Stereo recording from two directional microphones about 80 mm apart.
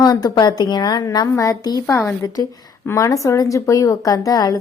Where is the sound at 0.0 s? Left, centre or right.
Left.